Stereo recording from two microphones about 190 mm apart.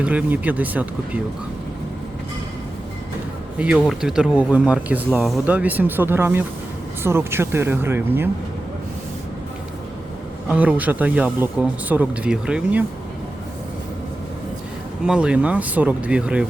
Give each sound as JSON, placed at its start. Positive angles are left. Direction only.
{"t": 0.0, "sound": "speech", "side_deg": -5}
{"t": 3.8, "sound": "speech", "side_deg": 0}
{"t": 10.5, "sound": "speech", "side_deg": -10}
{"t": 15.0, "sound": "speech", "side_deg": -5}